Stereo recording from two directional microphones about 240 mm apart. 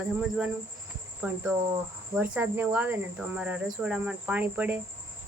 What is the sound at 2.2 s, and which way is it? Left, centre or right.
Speech, centre.